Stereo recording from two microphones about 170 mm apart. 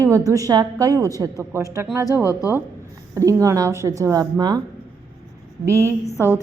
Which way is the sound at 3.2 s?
20° right (ahead or behind).